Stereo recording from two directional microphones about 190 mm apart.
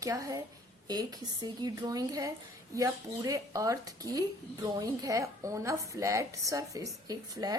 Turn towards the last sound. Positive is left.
turn(degrees=-20)  # may be behind; listen again after turning